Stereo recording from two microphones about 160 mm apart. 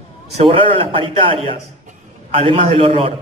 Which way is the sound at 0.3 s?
40° right (ahead or behind).